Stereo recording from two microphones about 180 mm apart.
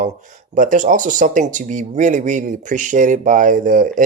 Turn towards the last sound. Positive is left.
turn(degrees=-45)  # may be behind; listen again after turning